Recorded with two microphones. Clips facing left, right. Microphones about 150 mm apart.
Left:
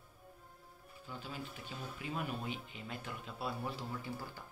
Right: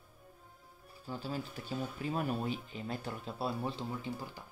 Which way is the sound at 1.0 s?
35° right (ahead or behind).